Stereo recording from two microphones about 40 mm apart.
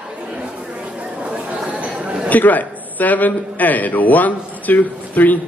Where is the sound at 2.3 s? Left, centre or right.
Left.